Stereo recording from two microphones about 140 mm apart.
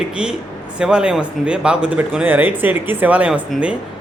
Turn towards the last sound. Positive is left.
turn(degrees=-10)  # may be behind; listen again after turning